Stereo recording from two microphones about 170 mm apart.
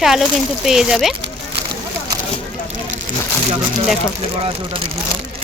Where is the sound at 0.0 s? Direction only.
Centre (ahead or behind).